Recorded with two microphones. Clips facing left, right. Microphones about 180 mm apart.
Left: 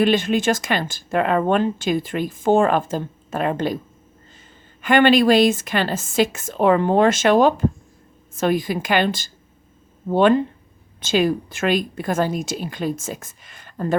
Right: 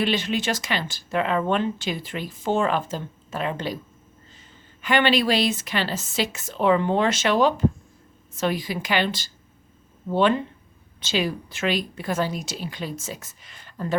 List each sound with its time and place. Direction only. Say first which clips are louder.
0.0 s speech: left 6 dB; 50° left (ahead or behind)
4.8 s speech: left 6 dB; 50° left (ahead or behind)